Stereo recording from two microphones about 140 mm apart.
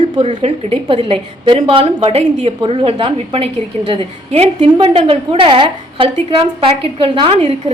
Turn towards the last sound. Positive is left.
turn(degrees=-45)  # may be behind; listen again after turning